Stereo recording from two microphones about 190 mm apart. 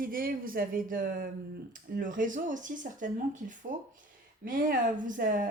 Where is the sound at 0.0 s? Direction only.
50° right (ahead or behind).